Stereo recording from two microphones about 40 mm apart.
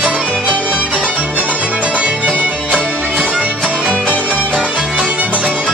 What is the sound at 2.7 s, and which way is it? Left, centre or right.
Music, left.